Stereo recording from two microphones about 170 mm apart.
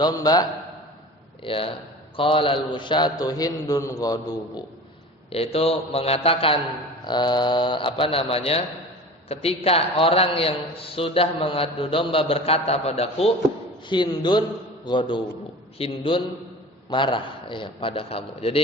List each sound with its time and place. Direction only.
0.0 s a man's voice: 20° left (ahead or behind)
1.4 s a man's voice: 30° left (ahead or behind)
5.3 s a man's voice: 35° left (ahead or behind)